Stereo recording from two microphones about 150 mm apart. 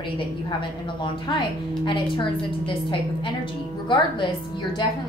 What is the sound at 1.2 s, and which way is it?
A woman's voice, 30° left (ahead or behind).